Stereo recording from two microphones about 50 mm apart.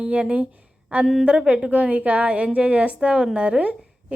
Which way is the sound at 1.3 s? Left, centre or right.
Right.